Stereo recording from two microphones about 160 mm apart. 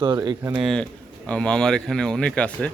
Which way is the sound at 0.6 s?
5° left (ahead or behind).